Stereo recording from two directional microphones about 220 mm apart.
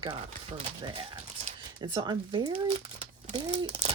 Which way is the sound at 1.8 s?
20° right (ahead or behind).